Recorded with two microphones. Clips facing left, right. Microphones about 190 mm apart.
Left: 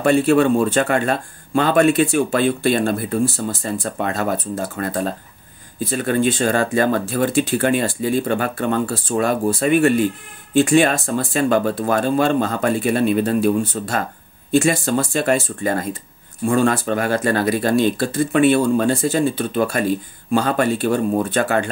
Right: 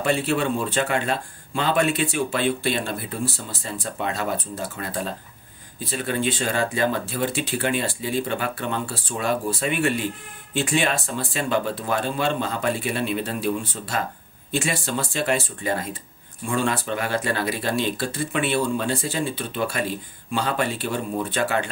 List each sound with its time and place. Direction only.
0.0 s speech: 50° left (ahead or behind)